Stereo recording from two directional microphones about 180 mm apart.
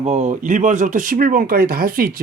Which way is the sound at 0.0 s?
40° right (ahead or behind).